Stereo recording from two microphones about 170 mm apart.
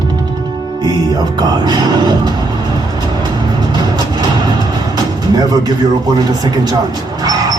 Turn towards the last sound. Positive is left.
turn(degrees=-25)  # may be behind; listen again after turning